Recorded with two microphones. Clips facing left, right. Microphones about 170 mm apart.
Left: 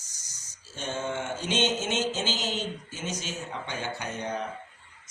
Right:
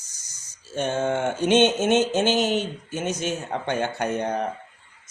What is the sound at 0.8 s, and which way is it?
Speech, 60° right (ahead or behind).